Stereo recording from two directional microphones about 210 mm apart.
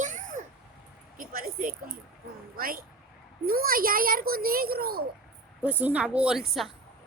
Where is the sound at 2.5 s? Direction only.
45° right (ahead or behind).